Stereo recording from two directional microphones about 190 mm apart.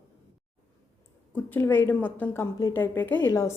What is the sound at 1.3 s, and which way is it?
A woman's voice, 10° left (ahead or behind).